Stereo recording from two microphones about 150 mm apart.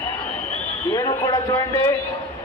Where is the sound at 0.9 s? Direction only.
25° left (ahead or behind).